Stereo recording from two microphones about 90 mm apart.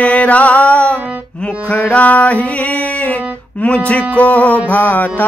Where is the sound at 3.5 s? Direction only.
15° left (ahead or behind).